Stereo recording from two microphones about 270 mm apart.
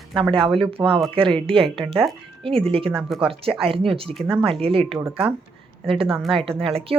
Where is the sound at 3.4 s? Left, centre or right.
Right.